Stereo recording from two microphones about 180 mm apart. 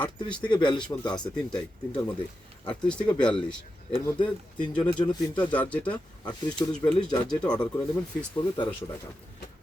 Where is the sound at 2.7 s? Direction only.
5° left (ahead or behind).